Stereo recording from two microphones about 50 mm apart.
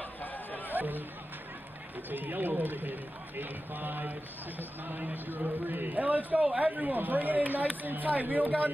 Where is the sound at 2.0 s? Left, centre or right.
Right.